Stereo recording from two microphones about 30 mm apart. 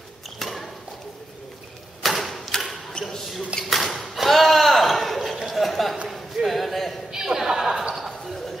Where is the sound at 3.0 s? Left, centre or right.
Centre.